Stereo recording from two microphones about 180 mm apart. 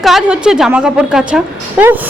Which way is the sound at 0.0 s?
Centre (ahead or behind).